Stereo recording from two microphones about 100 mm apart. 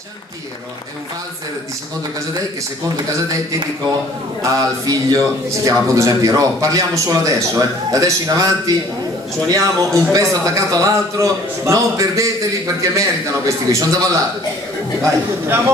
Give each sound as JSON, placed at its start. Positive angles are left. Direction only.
{"t": 4.4, "sound": "a man's voice", "side_deg": -35}